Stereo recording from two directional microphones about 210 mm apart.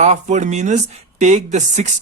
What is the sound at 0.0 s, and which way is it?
Speech, 35° right (ahead or behind).